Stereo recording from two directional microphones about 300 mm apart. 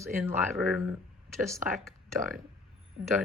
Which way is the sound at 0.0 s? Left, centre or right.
Centre.